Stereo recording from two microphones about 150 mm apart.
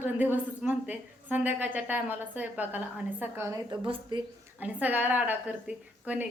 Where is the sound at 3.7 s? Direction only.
30° right (ahead or behind).